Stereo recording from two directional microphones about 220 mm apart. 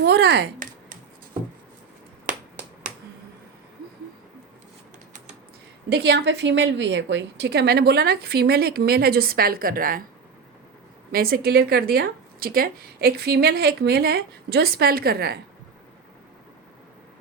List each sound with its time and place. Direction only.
0.0 s a sound: 50° right (ahead or behind)
5.9 s speech: 50° right (ahead or behind)
11.1 s speech: 45° right (ahead or behind)